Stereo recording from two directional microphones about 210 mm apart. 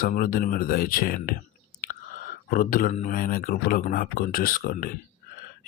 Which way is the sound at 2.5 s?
40° left (ahead or behind).